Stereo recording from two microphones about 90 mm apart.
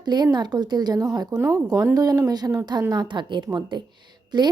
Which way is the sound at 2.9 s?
55° right (ahead or behind).